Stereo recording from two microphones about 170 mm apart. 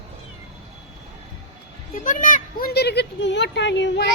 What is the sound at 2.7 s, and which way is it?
Speech, 75° left (ahead or behind).